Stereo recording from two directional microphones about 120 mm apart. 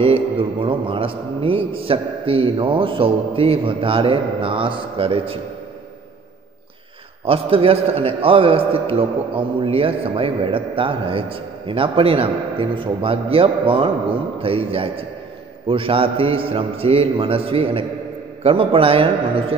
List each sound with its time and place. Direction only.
0.0 s a man's voice: 50° right (ahead or behind)
7.2 s a man's voice: 55° right (ahead or behind)